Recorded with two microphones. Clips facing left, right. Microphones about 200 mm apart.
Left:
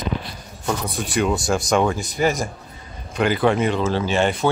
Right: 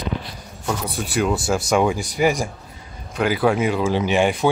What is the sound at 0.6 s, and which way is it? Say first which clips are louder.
Speech: left 1 dB; 5° right (ahead or behind).